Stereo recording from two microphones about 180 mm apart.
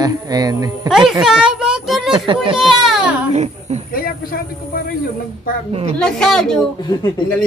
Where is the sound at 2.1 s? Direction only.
25° right (ahead or behind).